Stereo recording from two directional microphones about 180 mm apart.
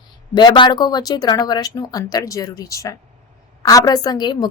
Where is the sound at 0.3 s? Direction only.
25° left (ahead or behind).